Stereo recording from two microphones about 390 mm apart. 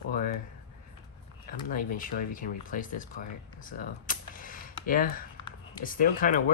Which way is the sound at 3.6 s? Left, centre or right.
Left.